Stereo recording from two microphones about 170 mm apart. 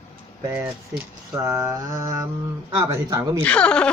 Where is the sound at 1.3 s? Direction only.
15° right (ahead or behind).